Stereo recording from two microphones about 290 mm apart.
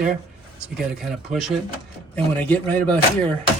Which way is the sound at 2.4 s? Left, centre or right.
Centre.